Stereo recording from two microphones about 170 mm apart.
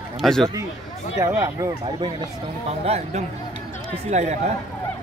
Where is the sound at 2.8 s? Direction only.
40° right (ahead or behind).